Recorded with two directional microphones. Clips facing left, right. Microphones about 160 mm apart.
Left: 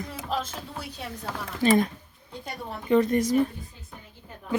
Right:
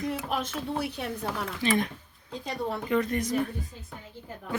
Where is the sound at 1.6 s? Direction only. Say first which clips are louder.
Left 6 dB; 40° left (ahead or behind).